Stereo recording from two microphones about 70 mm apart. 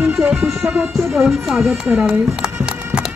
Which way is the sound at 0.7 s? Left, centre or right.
Centre.